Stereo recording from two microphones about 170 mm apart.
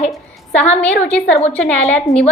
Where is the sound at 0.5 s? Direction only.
10° left (ahead or behind).